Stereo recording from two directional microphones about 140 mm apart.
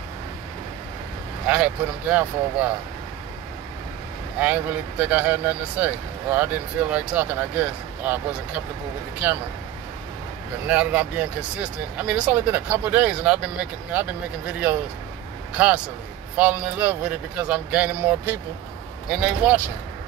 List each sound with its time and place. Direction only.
1.5 s speech: 10° right (ahead or behind)
4.4 s speech: 10° right (ahead or behind)
10.7 s speech: 10° right (ahead or behind)